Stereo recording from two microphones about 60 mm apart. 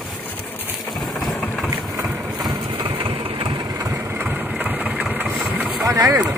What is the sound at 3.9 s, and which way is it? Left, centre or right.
Vehicle, right.